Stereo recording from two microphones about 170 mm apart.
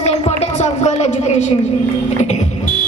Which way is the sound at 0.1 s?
40° left (ahead or behind).